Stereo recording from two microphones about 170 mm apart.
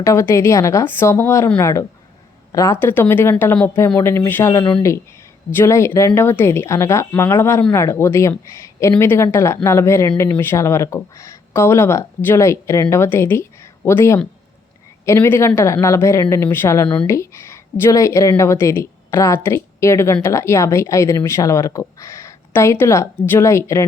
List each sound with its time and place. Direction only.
0.0 s speech: 15° left (ahead or behind)
16.9 s speech: 5° left (ahead or behind)
17.2 s speech: 15° left (ahead or behind)